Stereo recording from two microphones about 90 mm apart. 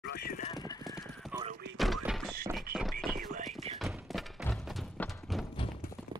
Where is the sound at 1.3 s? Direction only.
25° right (ahead or behind).